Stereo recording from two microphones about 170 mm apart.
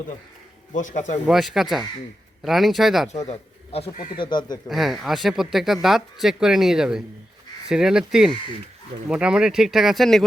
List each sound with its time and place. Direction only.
0.7 s a man's voice: 45° left (ahead or behind)
1.3 s speech: centre (ahead or behind)
3.2 s a man's voice: 35° left (ahead or behind)
3.9 s a man's voice: 50° left (ahead or behind)
4.2 s speech: 25° left (ahead or behind)
4.7 s speech: centre (ahead or behind)